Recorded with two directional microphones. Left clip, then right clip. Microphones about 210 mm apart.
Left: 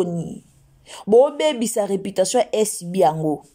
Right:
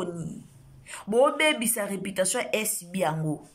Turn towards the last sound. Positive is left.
turn(degrees=30)  # may be behind; listen again after turning